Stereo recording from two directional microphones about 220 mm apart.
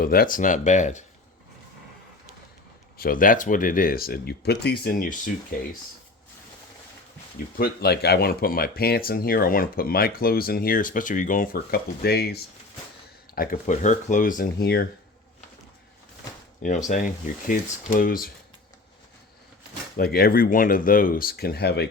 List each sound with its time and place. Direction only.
0.0 s speech: 40° left (ahead or behind)
3.0 s speech: 40° left (ahead or behind)
7.6 s speech: 45° left (ahead or behind)
16.6 s speech: 35° left (ahead or behind)
20.0 s speech: 45° left (ahead or behind)